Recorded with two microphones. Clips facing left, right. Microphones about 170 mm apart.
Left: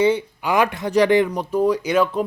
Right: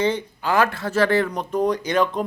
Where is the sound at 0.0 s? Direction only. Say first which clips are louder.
Left 4 dB; 10° left (ahead or behind).